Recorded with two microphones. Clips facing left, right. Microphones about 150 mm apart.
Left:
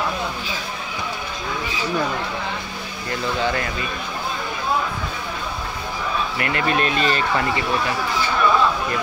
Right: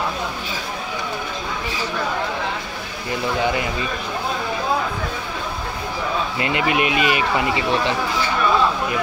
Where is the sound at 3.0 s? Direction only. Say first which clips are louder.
Right 2 dB; 15° right (ahead or behind).